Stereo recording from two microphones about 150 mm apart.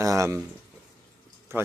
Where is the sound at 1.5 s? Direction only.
15° right (ahead or behind).